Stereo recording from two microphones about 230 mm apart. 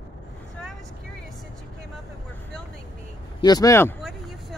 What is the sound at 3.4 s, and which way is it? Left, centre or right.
Speech, centre.